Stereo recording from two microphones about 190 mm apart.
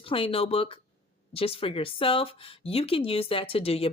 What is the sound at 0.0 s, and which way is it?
Speech, 30° left (ahead or behind).